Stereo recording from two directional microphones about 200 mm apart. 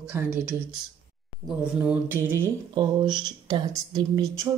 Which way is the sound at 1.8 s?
10° right (ahead or behind).